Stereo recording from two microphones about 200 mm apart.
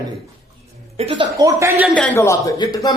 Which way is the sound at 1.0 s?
30° right (ahead or behind).